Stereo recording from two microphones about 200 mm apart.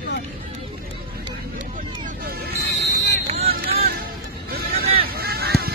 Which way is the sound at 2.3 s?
50° right (ahead or behind).